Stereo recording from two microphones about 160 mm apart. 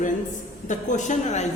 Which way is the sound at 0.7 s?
50° left (ahead or behind).